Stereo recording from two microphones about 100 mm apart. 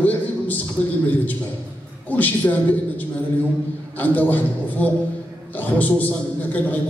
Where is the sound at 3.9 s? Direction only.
15° left (ahead or behind).